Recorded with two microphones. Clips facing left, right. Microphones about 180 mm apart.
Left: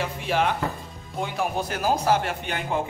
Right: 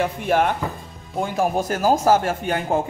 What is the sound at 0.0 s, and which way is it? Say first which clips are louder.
Speech: right 5 dB; 50° right (ahead or behind).